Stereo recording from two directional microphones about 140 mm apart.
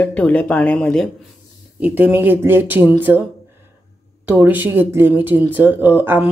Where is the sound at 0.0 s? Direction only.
10° left (ahead or behind).